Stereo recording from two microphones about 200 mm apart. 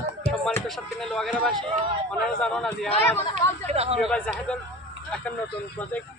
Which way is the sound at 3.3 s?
30° right (ahead or behind).